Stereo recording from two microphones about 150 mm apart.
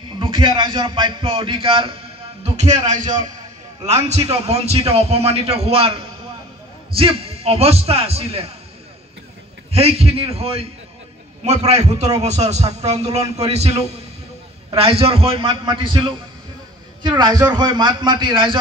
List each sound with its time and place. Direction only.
0.2 s a man's voice: 35° right (ahead or behind)
2.4 s a sound: 50° right (ahead or behind)
2.9 s a man's voice: 55° right (ahead or behind)
3.8 s a man's voice: 45° right (ahead or behind)
9.7 s a man's voice: 40° right (ahead or behind)